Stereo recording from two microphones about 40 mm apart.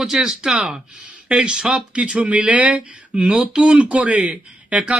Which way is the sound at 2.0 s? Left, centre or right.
Right.